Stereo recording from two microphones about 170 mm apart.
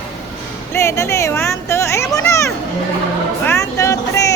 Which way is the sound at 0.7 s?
15° left (ahead or behind).